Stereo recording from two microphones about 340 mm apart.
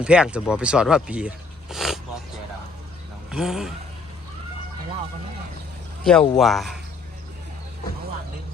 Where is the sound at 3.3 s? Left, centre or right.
Centre.